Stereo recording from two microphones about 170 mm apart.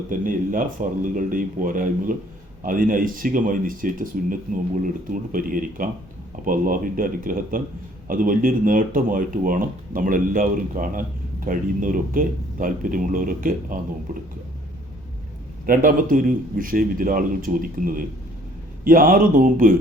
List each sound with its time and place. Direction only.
0.1 s a man's voice: 55° right (ahead or behind)
15.6 s a man's voice: 55° right (ahead or behind)